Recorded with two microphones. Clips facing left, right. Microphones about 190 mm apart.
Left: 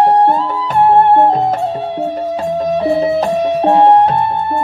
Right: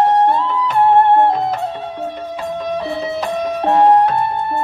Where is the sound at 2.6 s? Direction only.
40° left (ahead or behind).